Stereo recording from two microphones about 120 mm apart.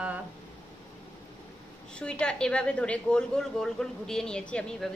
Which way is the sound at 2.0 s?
10° left (ahead or behind).